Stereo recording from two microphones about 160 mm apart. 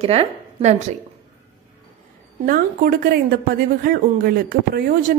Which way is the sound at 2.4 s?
60° right (ahead or behind).